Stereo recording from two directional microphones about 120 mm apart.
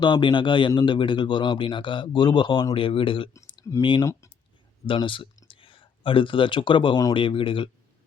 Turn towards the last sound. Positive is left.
turn(degrees=45)  # may be behind; listen again after turning